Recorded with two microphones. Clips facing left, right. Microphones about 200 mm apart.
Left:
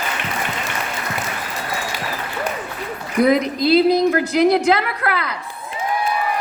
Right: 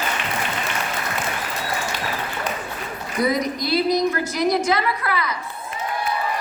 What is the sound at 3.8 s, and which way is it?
A woman's voice, 60° left (ahead or behind).